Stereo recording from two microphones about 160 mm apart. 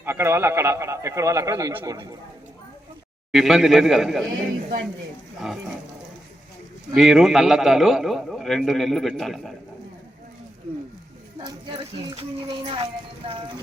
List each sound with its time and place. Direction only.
0.0 s a man's voice: 15° right (ahead or behind)
3.3 s a man's voice: centre (ahead or behind)
6.9 s a man's voice: 5° right (ahead or behind)
12.1 s a child's voice: 30° right (ahead or behind)